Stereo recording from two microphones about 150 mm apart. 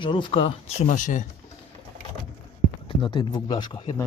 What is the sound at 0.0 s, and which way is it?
Speech, 35° left (ahead or behind).